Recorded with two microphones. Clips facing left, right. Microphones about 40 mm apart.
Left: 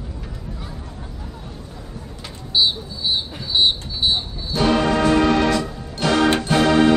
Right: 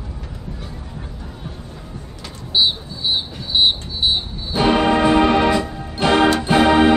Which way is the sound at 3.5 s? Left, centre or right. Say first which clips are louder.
Right 1 dB; right.